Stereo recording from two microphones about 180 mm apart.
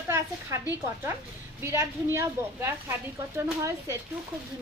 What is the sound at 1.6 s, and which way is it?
Speech, 15° right (ahead or behind).